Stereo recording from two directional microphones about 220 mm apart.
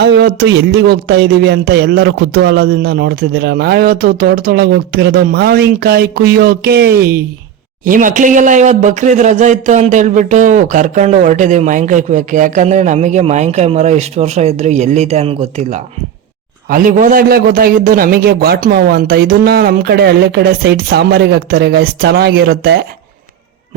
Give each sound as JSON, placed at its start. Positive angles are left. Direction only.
{"t": 0.0, "sound": "speech", "side_deg": -50}